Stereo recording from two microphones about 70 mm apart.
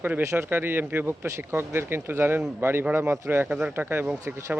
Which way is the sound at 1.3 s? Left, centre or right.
Right.